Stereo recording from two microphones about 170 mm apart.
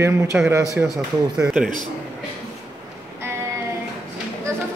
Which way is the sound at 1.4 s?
5° right (ahead or behind).